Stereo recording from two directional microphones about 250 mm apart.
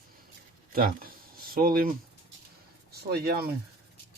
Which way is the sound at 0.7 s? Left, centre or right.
Right.